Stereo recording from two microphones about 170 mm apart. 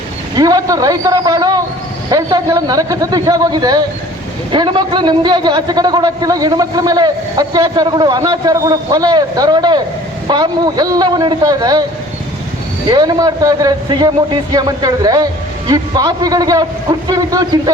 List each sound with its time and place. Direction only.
0.3 s a man's voice: 20° right (ahead or behind)
12.9 s a man's voice: 20° right (ahead or behind)